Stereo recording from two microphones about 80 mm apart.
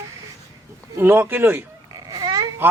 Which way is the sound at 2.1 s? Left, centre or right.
Right.